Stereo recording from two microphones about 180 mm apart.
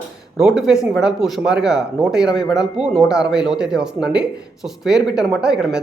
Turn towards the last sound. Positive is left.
turn(degrees=-5)  # may be behind; listen again after turning